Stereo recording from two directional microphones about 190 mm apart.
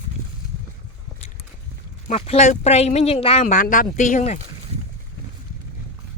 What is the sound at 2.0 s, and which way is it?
Speech, 35° left (ahead or behind).